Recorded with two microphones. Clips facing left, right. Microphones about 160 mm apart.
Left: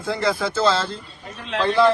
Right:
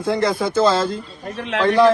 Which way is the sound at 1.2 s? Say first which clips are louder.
Right 3 dB; 70° right (ahead or behind).